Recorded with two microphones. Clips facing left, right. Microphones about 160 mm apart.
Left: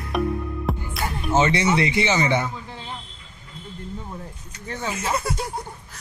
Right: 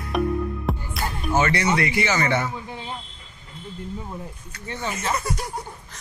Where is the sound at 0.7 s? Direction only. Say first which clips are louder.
Left 3 dB; centre (ahead or behind).